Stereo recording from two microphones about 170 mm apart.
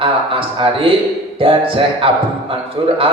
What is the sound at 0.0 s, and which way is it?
A man's voice, 30° right (ahead or behind).